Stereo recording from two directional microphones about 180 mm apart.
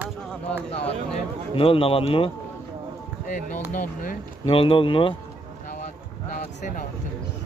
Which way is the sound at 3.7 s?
50° left (ahead or behind).